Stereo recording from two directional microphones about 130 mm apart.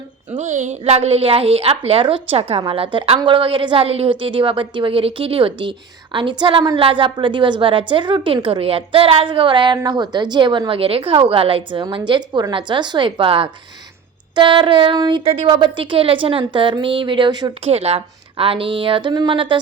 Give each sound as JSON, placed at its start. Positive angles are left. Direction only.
{"t": 0.3, "sound": "a woman's voice", "side_deg": -65}
{"t": 17.6, "sound": "a woman's voice", "side_deg": -50}